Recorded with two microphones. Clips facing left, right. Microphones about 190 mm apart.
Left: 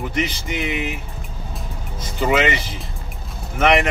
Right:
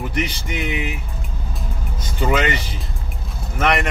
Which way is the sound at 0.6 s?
Centre (ahead or behind).